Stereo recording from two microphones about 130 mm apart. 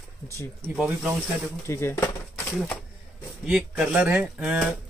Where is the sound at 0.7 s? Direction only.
5° right (ahead or behind).